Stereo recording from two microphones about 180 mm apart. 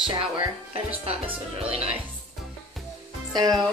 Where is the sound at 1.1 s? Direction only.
30° right (ahead or behind).